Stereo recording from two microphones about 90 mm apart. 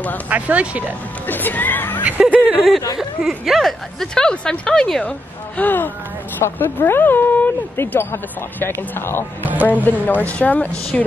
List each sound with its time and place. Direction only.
0.3 s speech: 15° right (ahead or behind)
1.2 s speech: 20° left (ahead or behind)
2.0 s speech: 15° right (ahead or behind)
3.0 s speech: 5° right (ahead or behind)
5.6 s speech: 20° left (ahead or behind)
9.4 s speech: 20° right (ahead or behind)
9.8 s speech: 20° left (ahead or behind)